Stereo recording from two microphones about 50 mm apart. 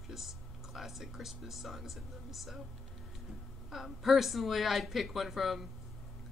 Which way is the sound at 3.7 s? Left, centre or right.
Centre.